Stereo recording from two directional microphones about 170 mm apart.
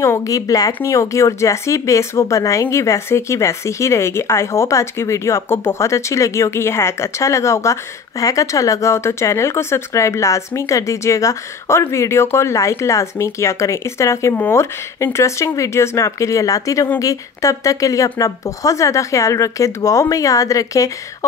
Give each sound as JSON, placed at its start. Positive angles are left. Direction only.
{"t": 0.0, "sound": "speech", "side_deg": 20}